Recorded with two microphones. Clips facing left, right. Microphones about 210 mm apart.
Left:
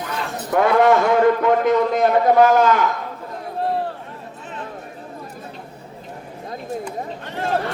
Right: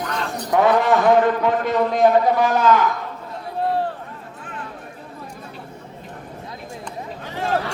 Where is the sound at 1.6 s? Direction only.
45° left (ahead or behind).